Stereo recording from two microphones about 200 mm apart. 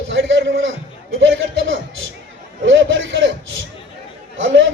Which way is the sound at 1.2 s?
70° right (ahead or behind).